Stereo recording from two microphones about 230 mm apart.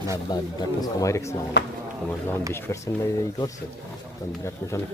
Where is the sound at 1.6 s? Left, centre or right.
Left.